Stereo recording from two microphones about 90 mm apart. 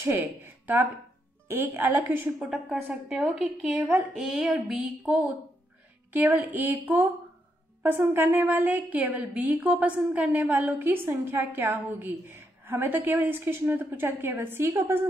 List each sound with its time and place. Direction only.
0.0 s a woman's voice: 25° right (ahead or behind)
2.7 s a woman's voice: 10° right (ahead or behind)
8.1 s a woman's voice: 25° right (ahead or behind)